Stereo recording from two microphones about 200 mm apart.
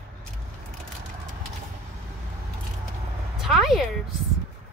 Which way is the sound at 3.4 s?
Centre (ahead or behind).